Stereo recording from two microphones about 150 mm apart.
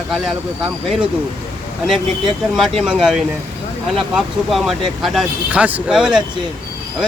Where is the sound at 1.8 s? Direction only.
Centre (ahead or behind).